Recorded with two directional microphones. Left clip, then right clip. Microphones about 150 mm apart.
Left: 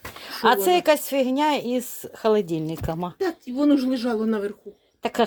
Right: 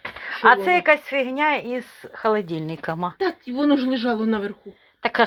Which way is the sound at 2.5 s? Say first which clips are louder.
Even; 35° left (ahead or behind).